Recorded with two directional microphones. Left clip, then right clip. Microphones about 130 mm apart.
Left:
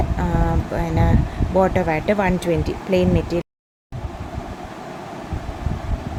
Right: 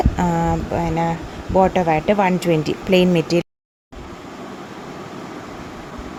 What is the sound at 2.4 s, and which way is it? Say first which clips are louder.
Speech: right 3 dB; 40° right (ahead or behind).